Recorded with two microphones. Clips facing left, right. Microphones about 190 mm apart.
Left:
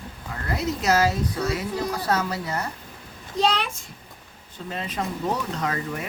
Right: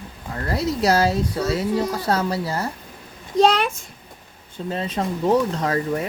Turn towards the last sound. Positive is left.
turn(degrees=-30)  # may be behind; listen again after turning